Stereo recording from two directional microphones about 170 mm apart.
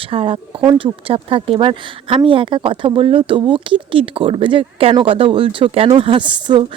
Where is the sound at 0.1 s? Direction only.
35° right (ahead or behind).